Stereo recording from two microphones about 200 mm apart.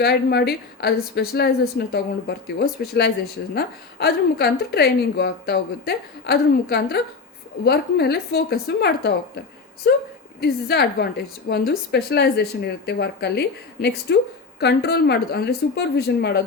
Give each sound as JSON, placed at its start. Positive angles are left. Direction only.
{"t": 0.0, "sound": "a woman's voice", "side_deg": 55}
{"t": 10.4, "sound": "a woman's voice", "side_deg": 55}